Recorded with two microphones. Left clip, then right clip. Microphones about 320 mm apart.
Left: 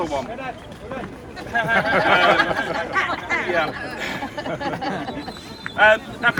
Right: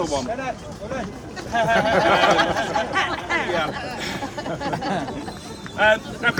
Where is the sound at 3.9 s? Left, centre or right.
Centre.